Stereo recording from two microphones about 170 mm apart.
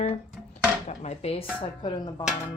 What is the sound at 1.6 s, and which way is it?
Speech, 30° left (ahead or behind).